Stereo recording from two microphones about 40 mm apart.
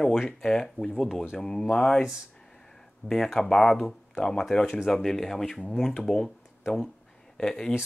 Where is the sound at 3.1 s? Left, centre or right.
Centre.